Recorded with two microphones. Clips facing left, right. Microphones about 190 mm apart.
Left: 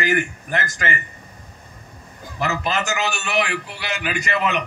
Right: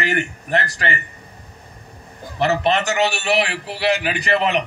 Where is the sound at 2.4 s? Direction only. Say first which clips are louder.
Right 5 dB; 35° right (ahead or behind).